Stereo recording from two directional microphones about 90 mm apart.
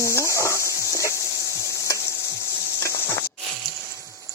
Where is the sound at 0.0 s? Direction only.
35° left (ahead or behind).